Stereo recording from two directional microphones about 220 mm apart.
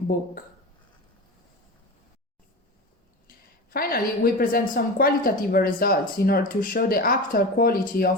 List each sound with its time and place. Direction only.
3.2 s a woman's voice: 40° left (ahead or behind)